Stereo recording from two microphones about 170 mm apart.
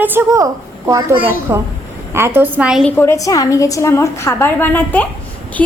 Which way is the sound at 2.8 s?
15° left (ahead or behind).